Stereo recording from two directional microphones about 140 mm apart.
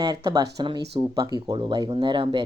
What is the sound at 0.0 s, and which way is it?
Speech, 30° right (ahead or behind).